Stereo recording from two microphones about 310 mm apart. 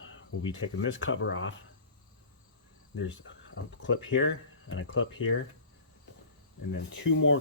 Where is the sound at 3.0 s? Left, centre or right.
Left.